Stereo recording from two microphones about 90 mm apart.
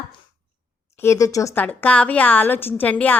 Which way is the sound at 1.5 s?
20° left (ahead or behind).